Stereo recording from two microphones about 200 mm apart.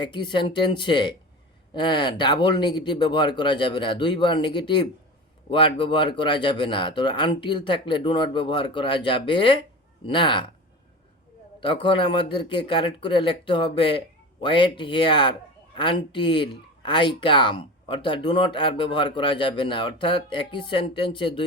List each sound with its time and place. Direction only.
0.0 s speech: 25° left (ahead or behind)
11.6 s speech: 25° left (ahead or behind)